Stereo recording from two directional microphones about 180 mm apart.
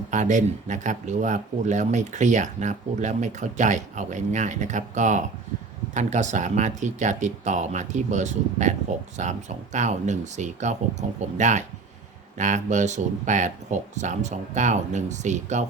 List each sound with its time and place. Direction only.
0.1 s speech: 40° right (ahead or behind)